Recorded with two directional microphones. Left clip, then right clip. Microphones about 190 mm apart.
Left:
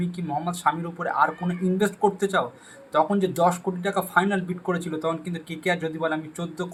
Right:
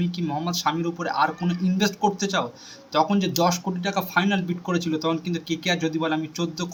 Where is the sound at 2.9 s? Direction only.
10° right (ahead or behind).